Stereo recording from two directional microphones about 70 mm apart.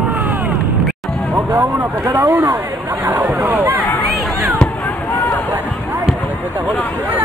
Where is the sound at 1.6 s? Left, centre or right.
Right.